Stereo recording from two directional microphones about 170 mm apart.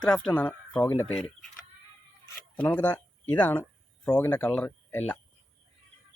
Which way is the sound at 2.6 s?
10° left (ahead or behind).